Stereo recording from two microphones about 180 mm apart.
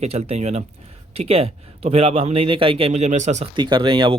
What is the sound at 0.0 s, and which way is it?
Speech, 35° right (ahead or behind).